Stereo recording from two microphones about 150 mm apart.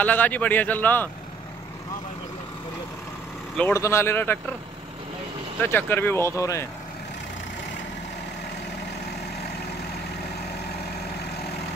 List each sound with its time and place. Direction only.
0.0 s a man's voice: 10° left (ahead or behind)
3.7 s a man's voice: 20° left (ahead or behind)
5.6 s a man's voice: 15° left (ahead or behind)